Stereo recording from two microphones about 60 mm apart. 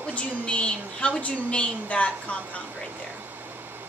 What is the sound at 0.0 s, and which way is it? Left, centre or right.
A woman's voice, centre.